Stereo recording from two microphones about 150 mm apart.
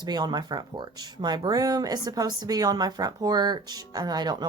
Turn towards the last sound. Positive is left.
turn(degrees=-25)  # may be behind; listen again after turning